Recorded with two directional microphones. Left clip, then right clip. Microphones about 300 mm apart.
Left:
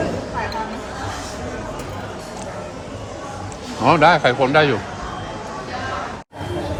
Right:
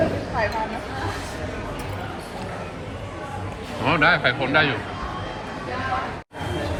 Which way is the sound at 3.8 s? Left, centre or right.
Centre.